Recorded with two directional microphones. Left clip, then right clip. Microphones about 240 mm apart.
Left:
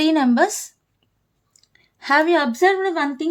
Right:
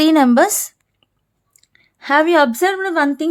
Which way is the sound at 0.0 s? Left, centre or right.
Right.